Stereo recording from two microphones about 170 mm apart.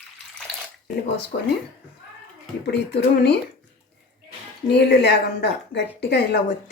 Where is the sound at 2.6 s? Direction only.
80° left.